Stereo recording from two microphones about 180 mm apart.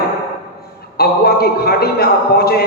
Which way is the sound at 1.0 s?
60° left (ahead or behind).